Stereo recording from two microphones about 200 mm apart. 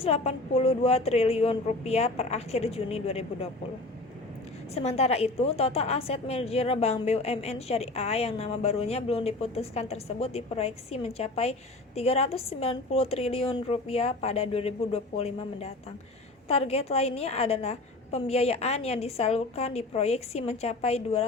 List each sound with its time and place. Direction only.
0.0 s a woman's voice: 30° left (ahead or behind)
4.7 s a woman's voice: 30° left (ahead or behind)